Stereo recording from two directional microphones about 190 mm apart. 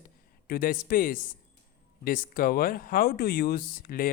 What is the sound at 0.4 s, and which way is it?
Speech, 50° left (ahead or behind).